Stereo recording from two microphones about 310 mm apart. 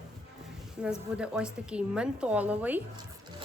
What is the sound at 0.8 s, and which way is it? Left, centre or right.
A woman's voice, centre.